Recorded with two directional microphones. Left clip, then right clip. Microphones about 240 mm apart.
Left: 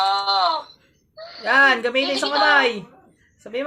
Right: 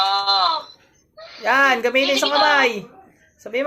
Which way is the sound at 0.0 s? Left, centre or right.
Centre.